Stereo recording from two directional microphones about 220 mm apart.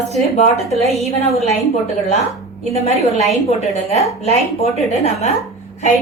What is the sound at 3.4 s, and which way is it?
A woman's voice, 30° left (ahead or behind).